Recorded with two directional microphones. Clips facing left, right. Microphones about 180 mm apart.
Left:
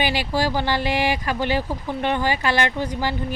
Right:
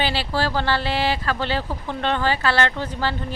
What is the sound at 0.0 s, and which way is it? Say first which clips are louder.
Speech: left 1 dB; 15° left (ahead or behind).